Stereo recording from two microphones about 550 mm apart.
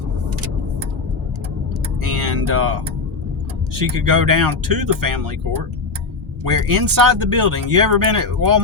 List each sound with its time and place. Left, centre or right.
2.0 s music: right
3.8 s speech: right
6.5 s speech: right